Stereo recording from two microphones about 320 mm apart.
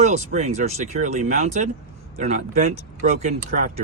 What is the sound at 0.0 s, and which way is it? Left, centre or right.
Speech, right.